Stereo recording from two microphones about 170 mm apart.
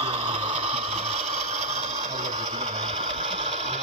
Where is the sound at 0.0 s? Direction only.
35° right (ahead or behind).